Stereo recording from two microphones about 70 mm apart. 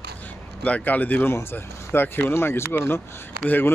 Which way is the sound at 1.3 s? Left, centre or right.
Left.